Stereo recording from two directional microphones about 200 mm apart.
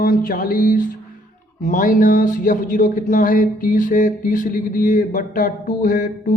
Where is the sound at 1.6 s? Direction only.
40° left (ahead or behind).